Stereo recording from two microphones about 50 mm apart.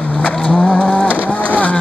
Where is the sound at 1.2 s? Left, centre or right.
Left.